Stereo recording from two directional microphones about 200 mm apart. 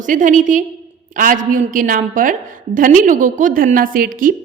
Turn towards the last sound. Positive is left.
turn(degrees=-45)  # may be behind; listen again after turning